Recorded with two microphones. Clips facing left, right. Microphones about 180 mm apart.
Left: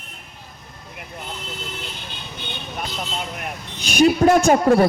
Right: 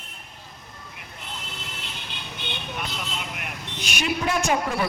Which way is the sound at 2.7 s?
40° left (ahead or behind).